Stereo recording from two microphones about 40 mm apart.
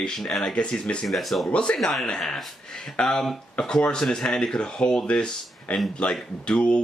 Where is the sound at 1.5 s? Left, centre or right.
Left.